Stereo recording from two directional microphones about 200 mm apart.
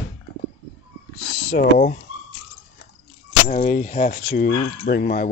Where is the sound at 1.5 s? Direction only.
45° left (ahead or behind).